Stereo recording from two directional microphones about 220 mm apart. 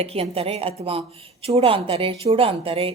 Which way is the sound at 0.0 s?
25° right (ahead or behind).